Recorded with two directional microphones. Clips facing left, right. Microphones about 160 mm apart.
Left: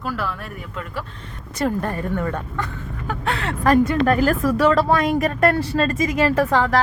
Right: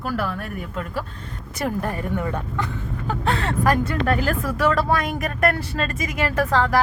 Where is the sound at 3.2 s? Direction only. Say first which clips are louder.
Right 1 dB; 35° right (ahead or behind).